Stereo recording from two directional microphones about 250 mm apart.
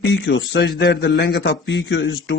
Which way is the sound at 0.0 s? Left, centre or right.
Left.